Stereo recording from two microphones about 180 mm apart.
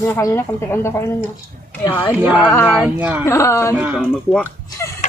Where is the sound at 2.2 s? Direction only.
10° right (ahead or behind).